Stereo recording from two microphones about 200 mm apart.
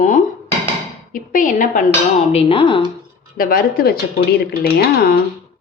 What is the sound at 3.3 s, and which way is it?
Speech, 45° left (ahead or behind).